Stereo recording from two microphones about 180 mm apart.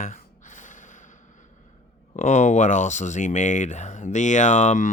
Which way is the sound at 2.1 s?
40° left (ahead or behind).